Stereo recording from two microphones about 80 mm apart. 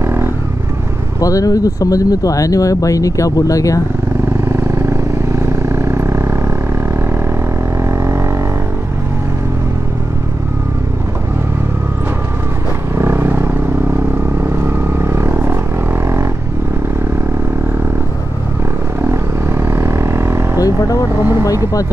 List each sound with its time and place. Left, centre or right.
0.0 s vehicle: right
1.2 s speech: left
4.5 s vehicle: right
8.0 s a sound: right
12.9 s vehicle: right
18.9 s vehicle: right